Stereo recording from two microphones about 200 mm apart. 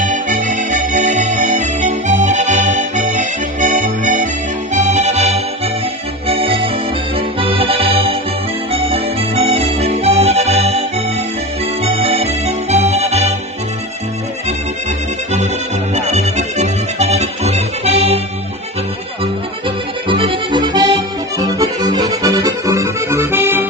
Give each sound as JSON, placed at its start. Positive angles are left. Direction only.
{"t": 0.0, "sound": "music", "side_deg": -40}
{"t": 7.2, "sound": "accordion", "side_deg": -25}
{"t": 8.7, "sound": "music", "side_deg": -30}
{"t": 16.0, "sound": "accordion", "side_deg": -35}
{"t": 19.2, "sound": "accordion", "side_deg": -25}